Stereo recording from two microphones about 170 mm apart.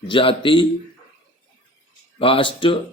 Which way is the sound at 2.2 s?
30° left (ahead or behind).